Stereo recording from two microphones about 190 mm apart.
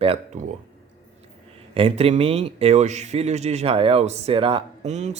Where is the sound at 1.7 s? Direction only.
30° right (ahead or behind).